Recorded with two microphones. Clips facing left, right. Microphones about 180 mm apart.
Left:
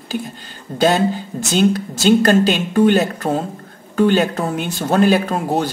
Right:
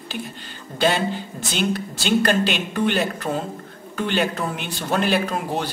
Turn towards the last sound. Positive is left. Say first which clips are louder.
# left 5 dB
turn(degrees=45)  # may be behind; listen again after turning